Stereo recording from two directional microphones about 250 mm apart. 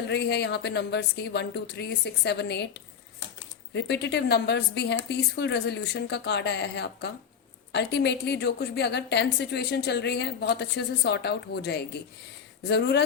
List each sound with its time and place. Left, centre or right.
0.1 s a woman's voice: left